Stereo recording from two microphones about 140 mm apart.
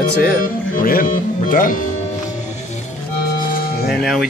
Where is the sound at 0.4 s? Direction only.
85° left.